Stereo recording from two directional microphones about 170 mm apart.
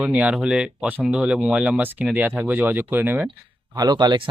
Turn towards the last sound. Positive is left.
turn(degrees=-30)  # may be behind; listen again after turning